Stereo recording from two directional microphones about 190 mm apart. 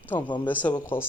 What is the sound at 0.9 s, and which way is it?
Speech, 30° left (ahead or behind).